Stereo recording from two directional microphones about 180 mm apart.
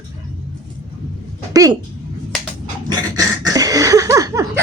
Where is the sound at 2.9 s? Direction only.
20° right (ahead or behind).